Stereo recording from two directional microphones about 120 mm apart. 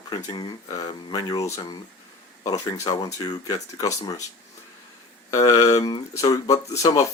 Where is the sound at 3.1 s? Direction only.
30° left (ahead or behind).